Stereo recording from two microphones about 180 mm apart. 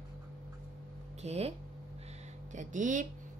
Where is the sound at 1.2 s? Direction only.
35° right (ahead or behind).